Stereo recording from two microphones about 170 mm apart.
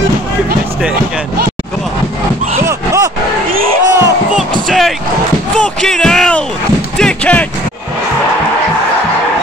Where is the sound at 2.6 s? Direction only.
20° right (ahead or behind).